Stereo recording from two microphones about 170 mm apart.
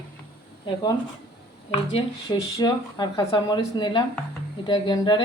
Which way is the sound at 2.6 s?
25° left (ahead or behind).